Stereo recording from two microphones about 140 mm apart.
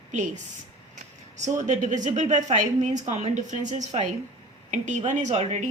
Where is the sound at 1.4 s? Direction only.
60° right (ahead or behind).